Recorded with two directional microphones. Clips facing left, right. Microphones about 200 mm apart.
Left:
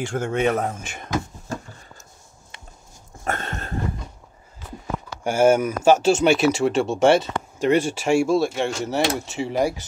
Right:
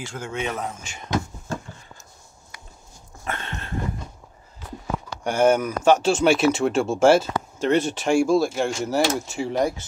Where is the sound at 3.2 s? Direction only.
45° left (ahead or behind).